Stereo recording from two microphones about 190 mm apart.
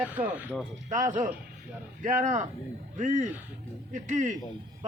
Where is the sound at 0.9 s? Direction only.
40° right (ahead or behind).